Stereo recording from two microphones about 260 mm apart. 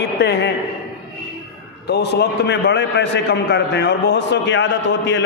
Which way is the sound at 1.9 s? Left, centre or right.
Left.